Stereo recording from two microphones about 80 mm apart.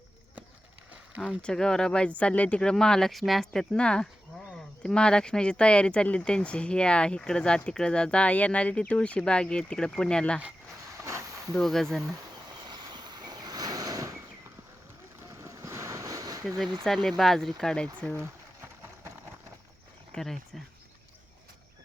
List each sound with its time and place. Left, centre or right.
1.4 s speech: centre
11.0 s a sound: right
11.5 s speech: centre
12.6 s vehicle: right
15.4 s boat: right
16.8 s speech: centre
20.1 s speech: centre